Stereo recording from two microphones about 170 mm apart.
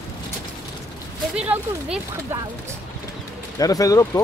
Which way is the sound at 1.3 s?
5° right (ahead or behind).